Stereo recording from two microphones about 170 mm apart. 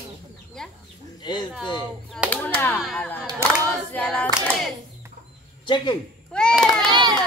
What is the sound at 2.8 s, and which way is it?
Hands, centre (ahead or behind).